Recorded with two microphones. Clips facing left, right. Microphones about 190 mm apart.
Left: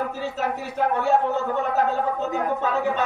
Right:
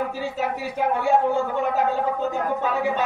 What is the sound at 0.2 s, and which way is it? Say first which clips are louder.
Speech: right 1 dB; 10° right (ahead or behind).